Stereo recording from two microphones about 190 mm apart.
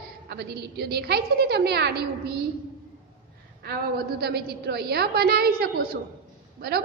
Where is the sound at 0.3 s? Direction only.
60° right (ahead or behind).